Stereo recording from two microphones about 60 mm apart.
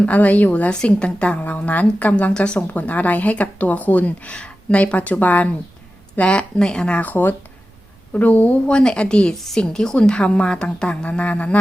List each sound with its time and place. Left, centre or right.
0.0 s a woman's voice: left
7.0 s a woman's voice: left; by 9.3 s centre
9.3 s a woman's voice: centre; by 11.6 s left